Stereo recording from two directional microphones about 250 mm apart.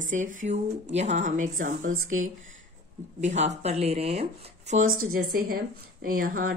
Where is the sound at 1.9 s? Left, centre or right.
Right.